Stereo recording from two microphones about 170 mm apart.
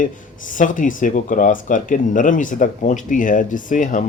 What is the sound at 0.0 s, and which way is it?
Speech, 50° left (ahead or behind).